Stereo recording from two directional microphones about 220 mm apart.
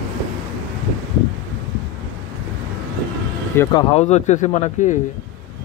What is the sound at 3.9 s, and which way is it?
Speech, 30° left (ahead or behind).